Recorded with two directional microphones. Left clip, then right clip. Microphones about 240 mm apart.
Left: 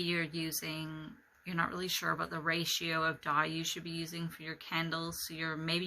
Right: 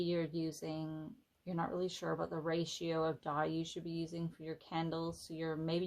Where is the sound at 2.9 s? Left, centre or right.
Right.